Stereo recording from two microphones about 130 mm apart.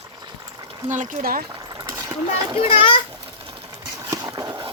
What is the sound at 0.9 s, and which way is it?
Speech, 70° right (ahead or behind).